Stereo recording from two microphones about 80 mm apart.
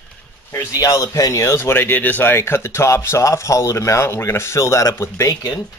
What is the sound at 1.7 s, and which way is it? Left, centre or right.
Speech, left.